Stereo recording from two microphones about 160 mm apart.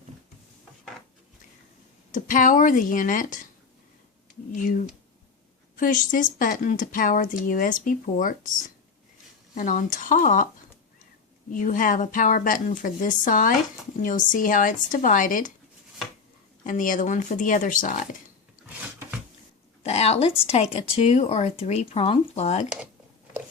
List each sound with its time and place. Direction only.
2.1 s speech: 55° left (ahead or behind)
4.5 s speech: 55° left (ahead or behind)
9.6 s speech: 55° left (ahead or behind)
11.5 s speech: 55° left (ahead or behind)
16.6 s speech: 55° left (ahead or behind)
19.8 s speech: 40° left (ahead or behind)